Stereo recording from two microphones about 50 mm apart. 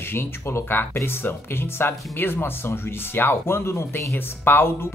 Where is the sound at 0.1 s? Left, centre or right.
Left.